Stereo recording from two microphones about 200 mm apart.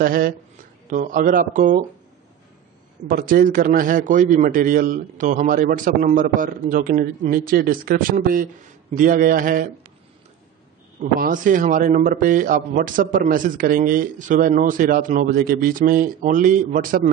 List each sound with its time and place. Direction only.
0.0 s a man's voice: 45° right (ahead or behind)
3.1 s a man's voice: 45° right (ahead or behind)
11.0 s a man's voice: 40° right (ahead or behind)